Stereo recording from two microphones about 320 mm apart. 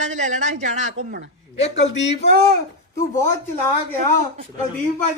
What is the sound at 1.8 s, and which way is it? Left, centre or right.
Speech, left.